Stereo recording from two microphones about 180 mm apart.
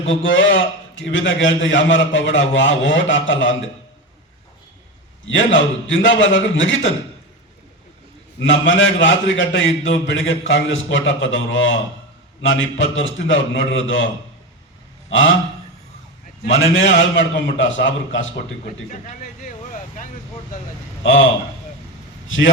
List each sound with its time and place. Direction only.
0.1 s a man's voice: 90° left
5.3 s a man's voice: 90° left
8.4 s a man's voice: 90° left
15.1 s a man's voice: 90° left
16.7 s a man's voice: 90° left
18.9 s speech: 45° left (ahead or behind)
21.0 s a man's voice: 90° left